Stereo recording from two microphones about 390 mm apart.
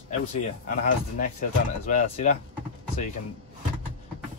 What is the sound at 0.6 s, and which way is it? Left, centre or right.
Speech, centre.